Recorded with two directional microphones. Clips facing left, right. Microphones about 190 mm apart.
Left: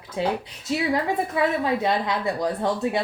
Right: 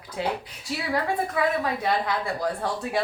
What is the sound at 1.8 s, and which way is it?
Speech, 20° left (ahead or behind).